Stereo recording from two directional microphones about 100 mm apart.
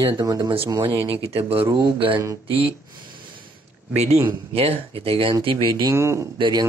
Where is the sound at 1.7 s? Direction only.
50° right (ahead or behind).